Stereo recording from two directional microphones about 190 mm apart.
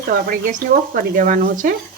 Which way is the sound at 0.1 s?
50° right (ahead or behind).